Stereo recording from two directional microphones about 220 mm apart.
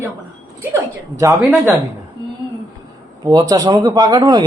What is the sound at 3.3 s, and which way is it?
Speech, 15° right (ahead or behind).